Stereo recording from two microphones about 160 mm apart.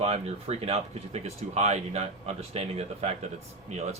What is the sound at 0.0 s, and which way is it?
A man's voice, 40° right (ahead or behind).